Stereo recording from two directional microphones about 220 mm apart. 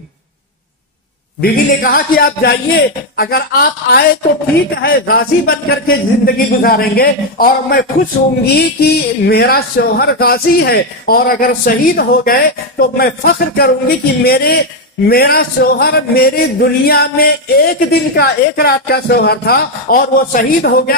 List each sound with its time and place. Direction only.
1.4 s speech: 40° left (ahead or behind)